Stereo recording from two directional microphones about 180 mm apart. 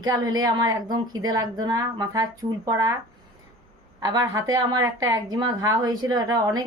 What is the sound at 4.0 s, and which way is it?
A woman's voice, 20° right (ahead or behind).